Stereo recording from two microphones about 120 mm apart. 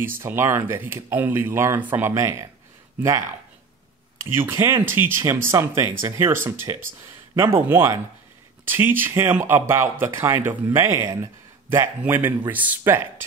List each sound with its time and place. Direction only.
0.0 s speech: 20° right (ahead or behind)
4.4 s speech: 20° right (ahead or behind)